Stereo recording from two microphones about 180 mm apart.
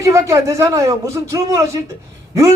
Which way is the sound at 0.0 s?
15° right (ahead or behind).